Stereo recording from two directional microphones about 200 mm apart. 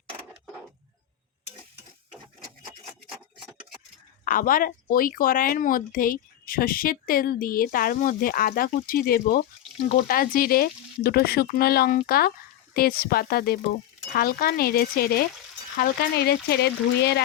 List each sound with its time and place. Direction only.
4.3 s a woman's voice: 45° left (ahead or behind)